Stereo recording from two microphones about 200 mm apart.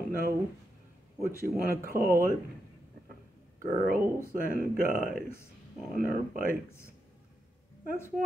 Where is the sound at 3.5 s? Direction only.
45° right (ahead or behind).